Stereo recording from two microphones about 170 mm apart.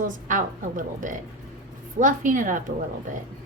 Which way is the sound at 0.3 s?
50° right (ahead or behind).